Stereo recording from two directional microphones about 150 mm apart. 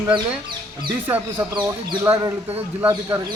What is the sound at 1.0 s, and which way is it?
Speech, 15° right (ahead or behind).